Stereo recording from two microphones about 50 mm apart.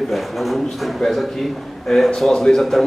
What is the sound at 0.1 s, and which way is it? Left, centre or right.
A man's voice, centre.